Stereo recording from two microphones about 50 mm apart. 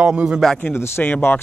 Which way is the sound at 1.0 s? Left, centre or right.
Left.